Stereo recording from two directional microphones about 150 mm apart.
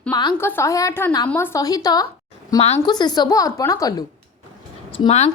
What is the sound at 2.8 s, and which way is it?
A woman's voice, 30° left (ahead or behind).